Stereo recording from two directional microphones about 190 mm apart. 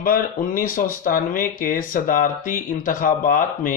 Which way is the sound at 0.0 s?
50° left (ahead or behind).